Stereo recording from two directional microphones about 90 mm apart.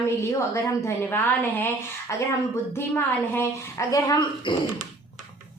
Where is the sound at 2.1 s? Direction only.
35° left (ahead or behind).